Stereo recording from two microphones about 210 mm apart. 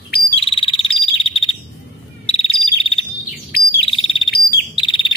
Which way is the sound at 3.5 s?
50° left (ahead or behind).